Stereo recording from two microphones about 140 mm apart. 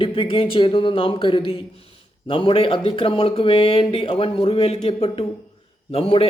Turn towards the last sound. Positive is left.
turn(degrees=45)  # may be behind; listen again after turning